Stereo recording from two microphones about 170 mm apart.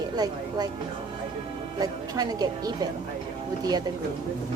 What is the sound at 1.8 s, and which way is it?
A woman's voice, 20° right (ahead or behind).